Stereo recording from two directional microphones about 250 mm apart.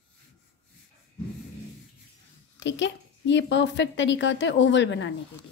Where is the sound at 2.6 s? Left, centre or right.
Left.